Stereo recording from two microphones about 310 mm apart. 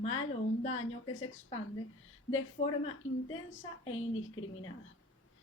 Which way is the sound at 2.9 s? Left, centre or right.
Left.